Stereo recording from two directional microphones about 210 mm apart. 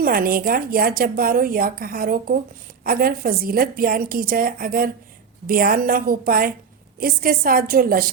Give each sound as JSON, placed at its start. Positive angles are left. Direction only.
{"t": 0.0, "sound": "a woman's voice", "side_deg": -45}